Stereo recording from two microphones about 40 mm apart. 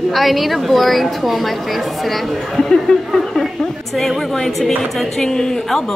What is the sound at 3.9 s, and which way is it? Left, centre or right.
A woman's voice, centre.